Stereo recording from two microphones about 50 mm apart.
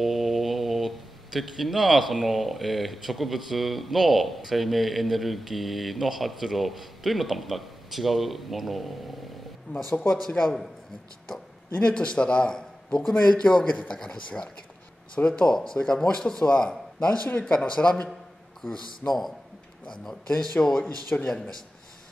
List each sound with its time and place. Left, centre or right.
0.0 s speech: centre
9.7 s speech: left
10.4 s speech: centre
11.7 s a man's voice: left
18.7 s speech: centre
21.1 s speech: left